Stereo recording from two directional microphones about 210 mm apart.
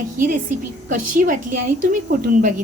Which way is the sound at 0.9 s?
40° right (ahead or behind).